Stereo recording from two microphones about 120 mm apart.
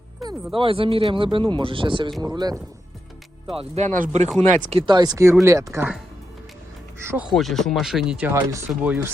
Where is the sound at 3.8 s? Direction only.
85° right.